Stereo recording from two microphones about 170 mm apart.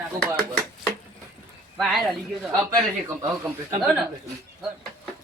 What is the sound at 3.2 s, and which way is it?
Speech, 20° right (ahead or behind).